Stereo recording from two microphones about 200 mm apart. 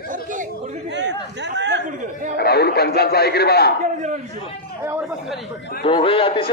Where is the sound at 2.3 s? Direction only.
55° left (ahead or behind).